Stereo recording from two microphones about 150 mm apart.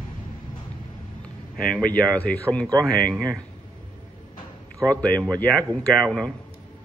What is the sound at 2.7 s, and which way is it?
Speech, 25° right (ahead or behind).